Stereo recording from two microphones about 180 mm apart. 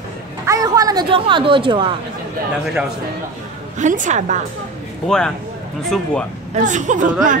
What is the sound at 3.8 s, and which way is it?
Speech, 45° right (ahead or behind).